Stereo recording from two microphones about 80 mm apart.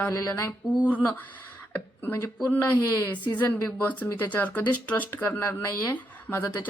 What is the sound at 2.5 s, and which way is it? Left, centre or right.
Speech, left.